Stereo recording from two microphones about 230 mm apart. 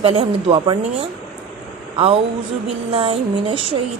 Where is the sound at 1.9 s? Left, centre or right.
Right.